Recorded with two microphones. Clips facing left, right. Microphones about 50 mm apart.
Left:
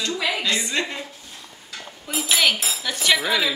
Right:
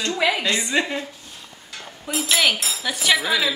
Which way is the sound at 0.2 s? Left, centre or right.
Right.